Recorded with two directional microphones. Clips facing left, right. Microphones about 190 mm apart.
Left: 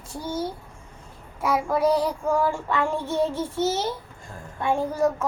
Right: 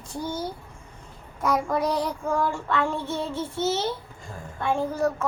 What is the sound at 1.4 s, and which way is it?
A child's voice, 5° left (ahead or behind).